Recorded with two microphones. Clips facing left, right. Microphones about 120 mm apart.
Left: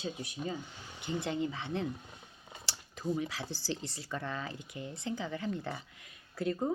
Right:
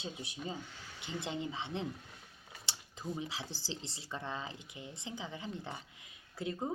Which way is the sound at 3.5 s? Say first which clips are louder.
Left 6 dB; 20° right (ahead or behind).